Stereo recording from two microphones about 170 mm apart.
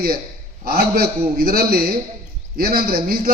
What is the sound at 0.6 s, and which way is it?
A man's voice, 60° right (ahead or behind).